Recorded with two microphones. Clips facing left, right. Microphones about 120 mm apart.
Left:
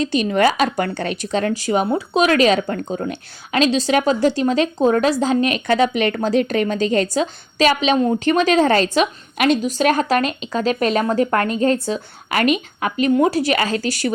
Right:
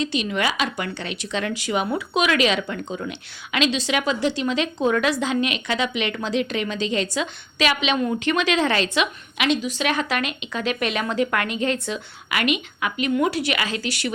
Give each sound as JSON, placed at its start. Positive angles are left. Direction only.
{"t": 0.0, "sound": "speech", "side_deg": 45}